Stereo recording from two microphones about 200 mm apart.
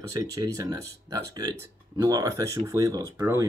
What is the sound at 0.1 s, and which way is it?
Speech, 15° right (ahead or behind).